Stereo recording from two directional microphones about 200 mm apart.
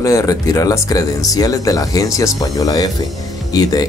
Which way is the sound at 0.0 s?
15° left (ahead or behind).